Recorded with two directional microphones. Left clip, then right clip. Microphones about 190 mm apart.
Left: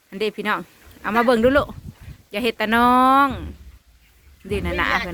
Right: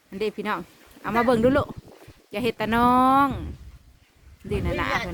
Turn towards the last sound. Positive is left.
turn(degrees=0)  # may be behind; listen again after turning